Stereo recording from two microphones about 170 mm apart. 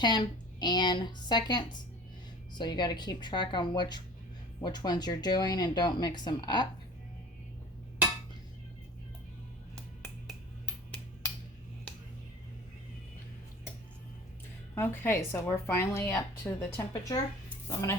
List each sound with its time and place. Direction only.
0.0 s speech: 25° left (ahead or behind)
10.0 s finger snapping: 5° left (ahead or behind)
14.8 s a woman's voice: 10° left (ahead or behind)